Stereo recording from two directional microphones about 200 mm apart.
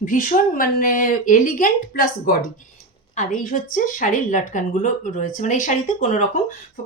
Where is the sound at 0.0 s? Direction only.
40° left (ahead or behind).